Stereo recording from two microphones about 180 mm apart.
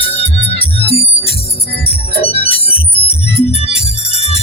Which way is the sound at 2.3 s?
35° left (ahead or behind).